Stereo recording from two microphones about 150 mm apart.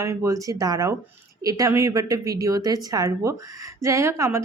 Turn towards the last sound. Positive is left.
turn(degrees=-20)  # may be behind; listen again after turning